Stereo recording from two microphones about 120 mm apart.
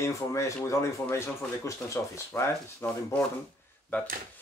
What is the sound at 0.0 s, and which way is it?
Speech, 25° left (ahead or behind).